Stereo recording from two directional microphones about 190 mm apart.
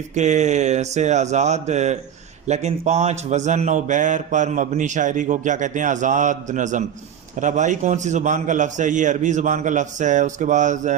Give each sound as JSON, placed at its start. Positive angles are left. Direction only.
{"t": 0.1, "sound": "a man's voice", "side_deg": -40}